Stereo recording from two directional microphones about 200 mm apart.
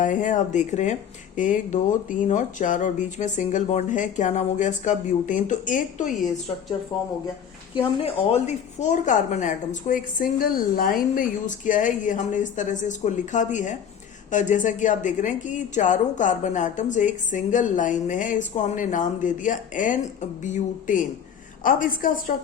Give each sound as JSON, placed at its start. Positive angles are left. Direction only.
{"t": 0.0, "sound": "speech", "side_deg": 40}
{"t": 6.9, "sound": "a woman's voice", "side_deg": 20}